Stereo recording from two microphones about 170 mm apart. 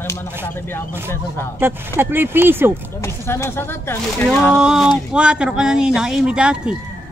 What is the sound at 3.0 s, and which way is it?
Speech, 15° left (ahead or behind).